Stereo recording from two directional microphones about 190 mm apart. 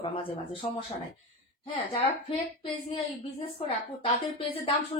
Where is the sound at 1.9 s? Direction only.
25° left (ahead or behind).